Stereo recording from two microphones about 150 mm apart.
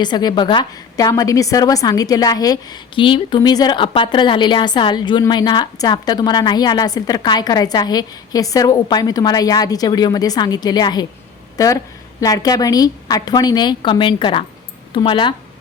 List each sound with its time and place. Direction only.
0.0 s a woman's voice: 30° left (ahead or behind)